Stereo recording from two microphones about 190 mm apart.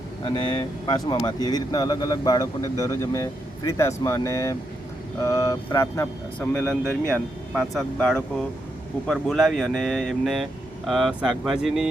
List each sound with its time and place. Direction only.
0.3 s speech: 25° left (ahead or behind)
6.7 s speech: 10° right (ahead or behind)
7.5 s speech: centre (ahead or behind)